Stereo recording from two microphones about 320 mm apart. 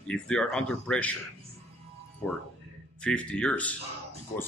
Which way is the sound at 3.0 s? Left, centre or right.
Centre.